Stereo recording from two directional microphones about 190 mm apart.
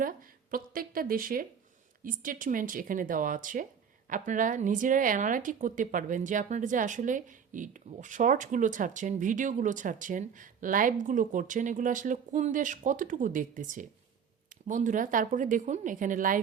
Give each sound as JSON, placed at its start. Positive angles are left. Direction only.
{"t": 0.0, "sound": "a woman's voice", "side_deg": -45}